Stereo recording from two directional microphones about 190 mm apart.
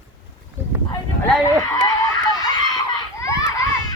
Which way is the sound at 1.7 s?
20° left (ahead or behind).